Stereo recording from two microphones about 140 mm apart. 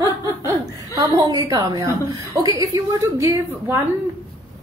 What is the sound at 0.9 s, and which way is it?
A woman's voice, 25° right (ahead or behind).